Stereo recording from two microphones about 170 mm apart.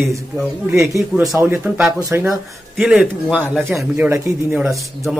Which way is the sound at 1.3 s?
10° right (ahead or behind).